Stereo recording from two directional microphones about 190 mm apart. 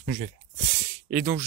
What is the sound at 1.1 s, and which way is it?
Speech, 45° right (ahead or behind).